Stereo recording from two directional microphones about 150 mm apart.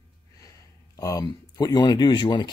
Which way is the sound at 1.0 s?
25° left (ahead or behind).